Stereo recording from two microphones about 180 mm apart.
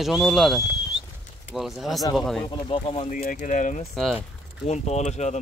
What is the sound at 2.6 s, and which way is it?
Speech, 30° left (ahead or behind).